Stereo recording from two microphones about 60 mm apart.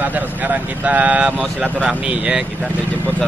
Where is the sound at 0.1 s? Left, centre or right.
Right.